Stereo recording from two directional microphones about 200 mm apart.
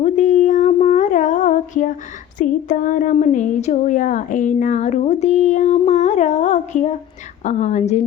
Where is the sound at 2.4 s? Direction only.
40° left (ahead or behind).